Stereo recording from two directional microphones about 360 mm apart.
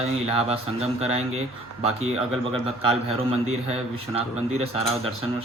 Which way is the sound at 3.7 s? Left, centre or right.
Centre.